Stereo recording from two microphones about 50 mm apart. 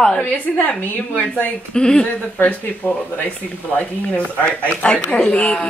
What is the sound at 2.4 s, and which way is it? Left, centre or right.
Speech, left.